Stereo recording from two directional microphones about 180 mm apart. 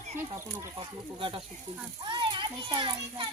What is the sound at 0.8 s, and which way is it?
Stir, 30° right (ahead or behind).